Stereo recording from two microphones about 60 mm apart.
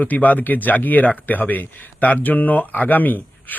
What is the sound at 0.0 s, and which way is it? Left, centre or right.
Speech, left.